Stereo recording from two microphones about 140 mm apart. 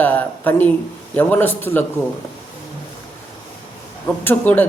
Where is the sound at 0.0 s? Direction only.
10° left (ahead or behind).